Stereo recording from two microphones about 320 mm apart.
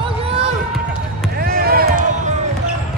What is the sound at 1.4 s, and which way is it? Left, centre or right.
Basketball bounce, right.